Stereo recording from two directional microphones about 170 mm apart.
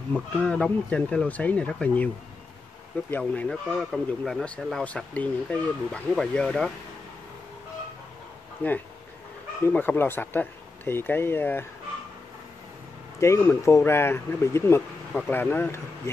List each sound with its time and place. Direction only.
0.1 s speech: 5° left (ahead or behind)
3.1 s speech: 10° left (ahead or behind)
9.7 s speech: 10° left (ahead or behind)
13.2 s speech: 15° left (ahead or behind)